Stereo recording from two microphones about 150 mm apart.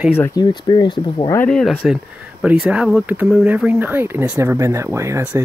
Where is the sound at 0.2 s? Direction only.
25° left (ahead or behind).